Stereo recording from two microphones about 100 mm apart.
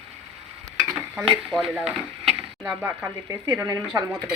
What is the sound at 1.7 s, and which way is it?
Chop, 5° right (ahead or behind).